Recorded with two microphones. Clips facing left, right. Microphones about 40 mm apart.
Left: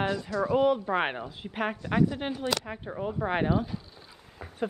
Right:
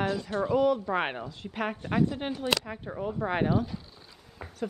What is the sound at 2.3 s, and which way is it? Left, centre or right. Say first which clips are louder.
Speech: right 1 dB; right.